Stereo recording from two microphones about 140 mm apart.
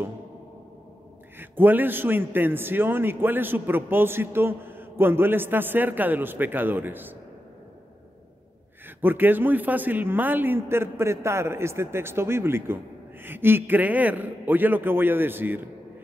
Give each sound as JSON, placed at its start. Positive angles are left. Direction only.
{"t": 1.4, "sound": "a man's voice", "side_deg": -15}
{"t": 9.0, "sound": "a man's voice", "side_deg": -15}